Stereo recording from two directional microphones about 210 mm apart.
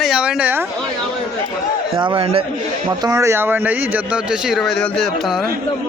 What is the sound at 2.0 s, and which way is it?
Speech, 25° right (ahead or behind).